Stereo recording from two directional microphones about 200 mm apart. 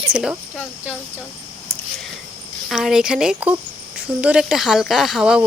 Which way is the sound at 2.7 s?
Centre (ahead or behind).